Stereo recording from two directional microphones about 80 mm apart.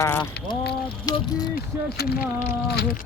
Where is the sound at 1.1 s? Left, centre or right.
Left.